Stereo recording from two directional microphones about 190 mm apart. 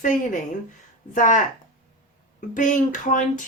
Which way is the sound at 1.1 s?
40° left (ahead or behind).